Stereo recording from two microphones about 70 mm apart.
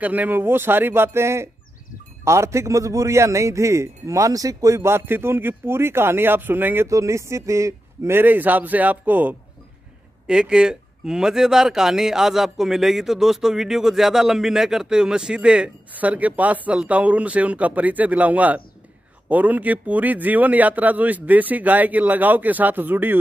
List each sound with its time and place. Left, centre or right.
0.0 s a man's voice: right
4.8 s speech: right
6.9 s a man's voice: right
8.1 s speech: right
10.2 s a man's voice: centre